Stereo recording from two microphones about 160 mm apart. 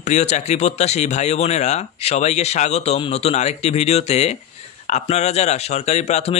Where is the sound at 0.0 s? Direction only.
45° left (ahead or behind).